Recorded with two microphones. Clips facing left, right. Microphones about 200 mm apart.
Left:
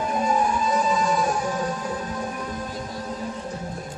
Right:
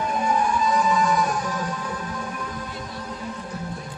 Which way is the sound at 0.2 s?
25° left (ahead or behind).